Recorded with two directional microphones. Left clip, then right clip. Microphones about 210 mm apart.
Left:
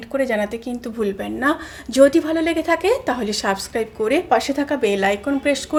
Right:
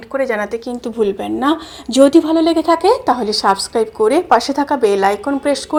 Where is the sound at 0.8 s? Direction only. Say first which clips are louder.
Right 7 dB; 20° right (ahead or behind).